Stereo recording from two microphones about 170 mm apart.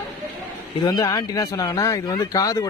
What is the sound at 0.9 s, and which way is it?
Speech, 20° left (ahead or behind).